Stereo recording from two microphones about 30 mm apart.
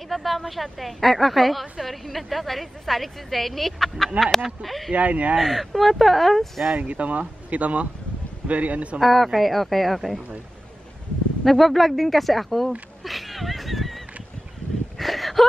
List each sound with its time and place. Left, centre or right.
0.1 s a woman's voice: centre
4.9 s speech: right
5.4 s a woman's voice: centre
6.8 s speech: right
9.0 s a woman's voice: centre
11.4 s a woman's voice: centre
13.0 s a sound: centre
15.0 s a sound: centre